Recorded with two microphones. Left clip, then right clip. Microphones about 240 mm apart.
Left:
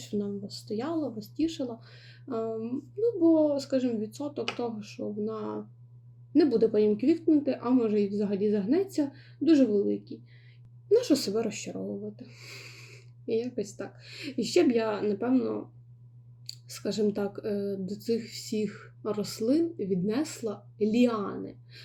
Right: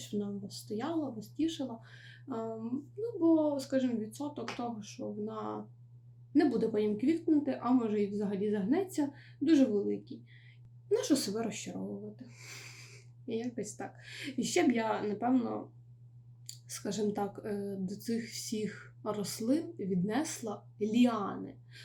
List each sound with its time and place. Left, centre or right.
0.0 s speech: centre
16.6 s speech: centre